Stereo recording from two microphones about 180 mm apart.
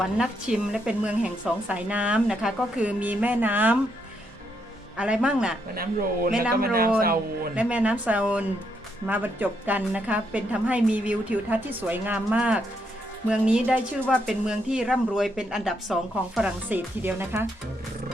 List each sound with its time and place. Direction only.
0.0 s speech: 5° right (ahead or behind)
4.9 s speech: 5° right (ahead or behind)
5.7 s speech: 55° right (ahead or behind)
7.5 s speech: 5° right (ahead or behind)
14.0 s speech: 5° left (ahead or behind); by 17.4 s 10° right (ahead or behind)